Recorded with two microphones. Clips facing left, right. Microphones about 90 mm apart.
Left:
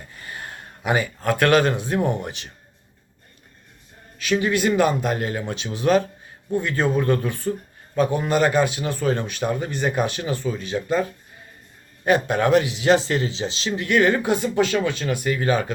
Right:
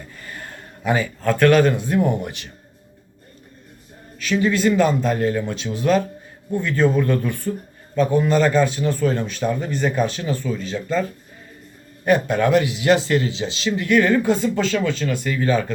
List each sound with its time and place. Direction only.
0.3 s a man's voice: 15° left (ahead or behind)
4.2 s speech: 15° left (ahead or behind)
6.6 s speech: 20° left (ahead or behind)
12.0 s speech: 20° left (ahead or behind)